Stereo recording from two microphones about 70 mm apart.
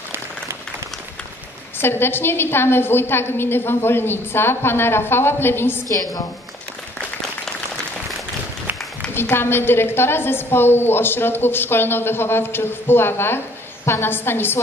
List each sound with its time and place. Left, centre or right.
1.8 s a woman's voice: left
9.1 s a woman's voice: left